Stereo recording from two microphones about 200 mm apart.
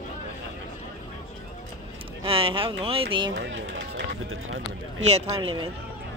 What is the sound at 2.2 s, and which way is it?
Speech, 25° right (ahead or behind).